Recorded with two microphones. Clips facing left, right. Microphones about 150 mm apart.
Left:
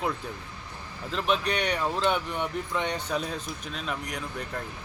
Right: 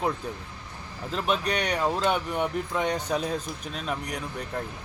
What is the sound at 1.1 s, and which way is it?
Speech, 5° right (ahead or behind).